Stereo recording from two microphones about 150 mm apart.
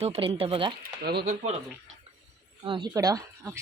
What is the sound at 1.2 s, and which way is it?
Speech, 50° right (ahead or behind).